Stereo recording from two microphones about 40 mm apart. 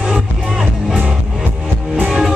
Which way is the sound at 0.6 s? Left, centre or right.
Centre.